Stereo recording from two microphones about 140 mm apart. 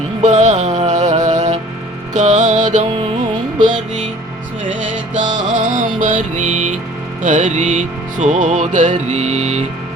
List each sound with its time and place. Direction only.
0.2 s music: 60° right (ahead or behind)
5.1 s music: 65° right (ahead or behind)